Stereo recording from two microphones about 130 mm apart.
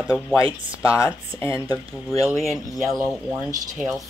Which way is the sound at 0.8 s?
25° left (ahead or behind).